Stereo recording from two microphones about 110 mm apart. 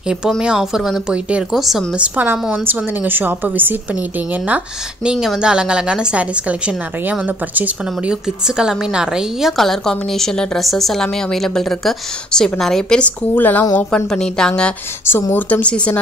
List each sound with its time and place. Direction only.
0.4 s a woman's voice: 5° right (ahead or behind)
2.6 s a woman's voice: 15° right (ahead or behind)
5.0 s a woman's voice: 5° right (ahead or behind); by 13.7 s 15° left (ahead or behind)
13.9 s a woman's voice: 5° left (ahead or behind)
15.0 s a woman's voice: 20° left (ahead or behind)